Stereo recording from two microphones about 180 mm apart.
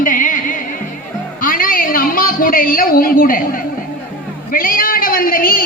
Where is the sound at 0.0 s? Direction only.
50° left (ahead or behind).